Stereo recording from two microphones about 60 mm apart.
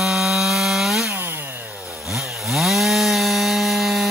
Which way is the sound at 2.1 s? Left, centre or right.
Centre.